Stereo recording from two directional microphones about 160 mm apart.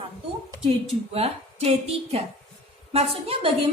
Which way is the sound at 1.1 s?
40° right (ahead or behind).